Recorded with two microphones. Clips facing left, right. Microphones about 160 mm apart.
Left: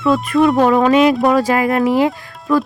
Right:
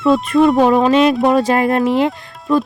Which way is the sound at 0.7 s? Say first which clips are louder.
Even; 20° right (ahead or behind).